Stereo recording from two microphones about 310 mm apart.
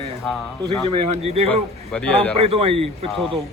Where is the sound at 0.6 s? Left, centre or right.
Centre.